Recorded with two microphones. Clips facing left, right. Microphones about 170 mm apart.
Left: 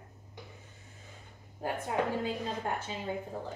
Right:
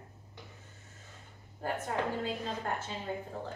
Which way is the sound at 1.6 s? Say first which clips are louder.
Left 2 dB; 15° left (ahead or behind).